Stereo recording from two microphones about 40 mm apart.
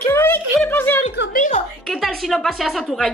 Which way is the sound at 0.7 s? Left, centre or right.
Left.